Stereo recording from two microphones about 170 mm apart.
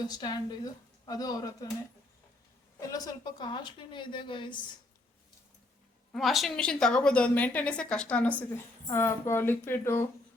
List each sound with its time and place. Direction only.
0.1 s a woman's voice: 25° left (ahead or behind)
2.8 s a woman's voice: 20° left (ahead or behind)
6.1 s a woman's voice: centre (ahead or behind)